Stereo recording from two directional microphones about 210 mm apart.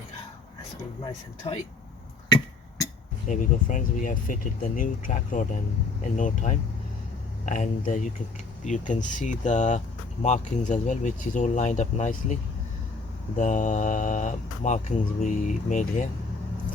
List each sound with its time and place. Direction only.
1.5 s speech: 25° left (ahead or behind)
2.3 s a sound: 15° left (ahead or behind)
3.2 s speech: 35° left (ahead or behind)